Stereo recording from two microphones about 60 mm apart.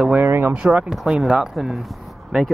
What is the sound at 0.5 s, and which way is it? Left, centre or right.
Speech, centre.